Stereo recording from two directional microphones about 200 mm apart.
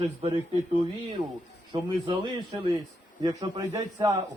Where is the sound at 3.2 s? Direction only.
20° right (ahead or behind).